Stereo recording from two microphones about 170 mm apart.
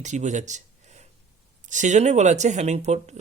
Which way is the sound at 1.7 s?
45° right (ahead or behind).